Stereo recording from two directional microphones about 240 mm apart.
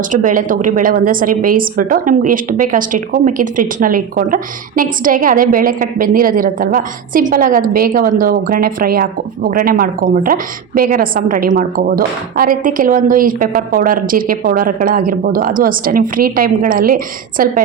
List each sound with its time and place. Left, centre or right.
0.1 s a woman's voice: right